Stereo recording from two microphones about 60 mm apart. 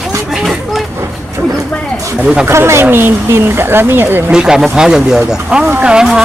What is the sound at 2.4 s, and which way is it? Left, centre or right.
Speech, right.